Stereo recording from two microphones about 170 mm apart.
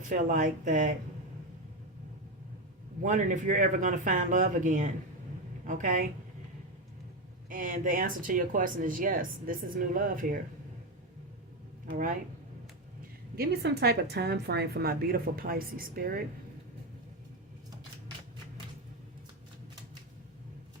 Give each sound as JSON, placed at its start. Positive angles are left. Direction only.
{"t": 0.1, "sound": "speech", "side_deg": -50}
{"t": 3.0, "sound": "speech", "side_deg": -50}
{"t": 7.5, "sound": "speech", "side_deg": -55}
{"t": 13.3, "sound": "a woman's voice", "side_deg": -65}